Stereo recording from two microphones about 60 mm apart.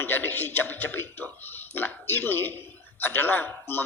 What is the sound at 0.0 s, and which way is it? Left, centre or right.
A man's voice, left.